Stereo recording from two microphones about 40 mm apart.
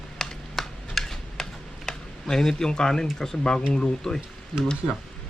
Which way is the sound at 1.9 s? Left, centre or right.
Centre.